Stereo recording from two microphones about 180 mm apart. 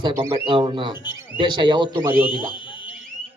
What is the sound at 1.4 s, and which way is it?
Speech, 25° right (ahead or behind).